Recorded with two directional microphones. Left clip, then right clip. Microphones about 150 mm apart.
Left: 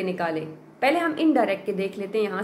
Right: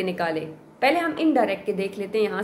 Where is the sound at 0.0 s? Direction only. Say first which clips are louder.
Right 1 dB; 10° right (ahead or behind).